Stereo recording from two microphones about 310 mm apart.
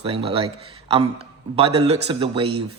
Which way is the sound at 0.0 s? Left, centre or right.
Centre.